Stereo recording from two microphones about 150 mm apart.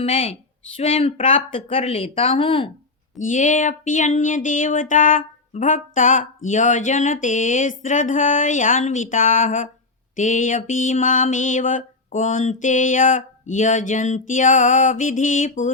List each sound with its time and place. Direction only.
0.0 s speech: 40° left (ahead or behind)
3.2 s speech: 60° left (ahead or behind)